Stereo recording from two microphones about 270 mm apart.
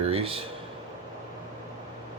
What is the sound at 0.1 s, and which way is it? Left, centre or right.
Speech, right.